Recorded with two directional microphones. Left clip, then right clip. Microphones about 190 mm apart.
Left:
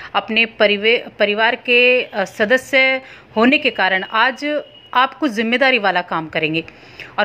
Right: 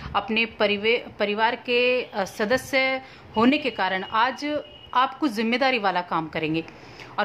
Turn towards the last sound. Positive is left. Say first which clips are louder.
# left 6 dB
turn(degrees=10)  # may be behind; listen again after turning